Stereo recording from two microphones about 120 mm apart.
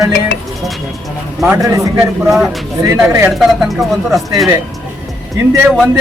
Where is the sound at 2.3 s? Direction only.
Centre (ahead or behind).